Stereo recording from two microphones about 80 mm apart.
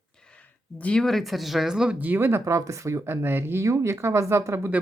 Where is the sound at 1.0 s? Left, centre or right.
Centre.